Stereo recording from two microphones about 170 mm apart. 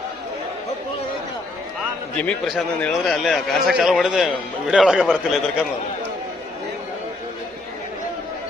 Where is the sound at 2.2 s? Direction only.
Centre (ahead or behind).